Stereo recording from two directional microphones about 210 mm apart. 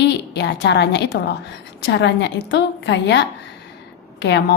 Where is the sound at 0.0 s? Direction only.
55° left (ahead or behind).